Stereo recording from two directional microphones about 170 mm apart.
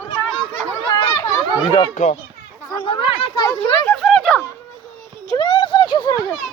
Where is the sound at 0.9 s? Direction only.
25° left (ahead or behind).